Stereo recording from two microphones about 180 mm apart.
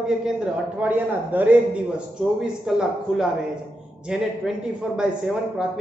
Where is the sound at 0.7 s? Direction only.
10° right (ahead or behind).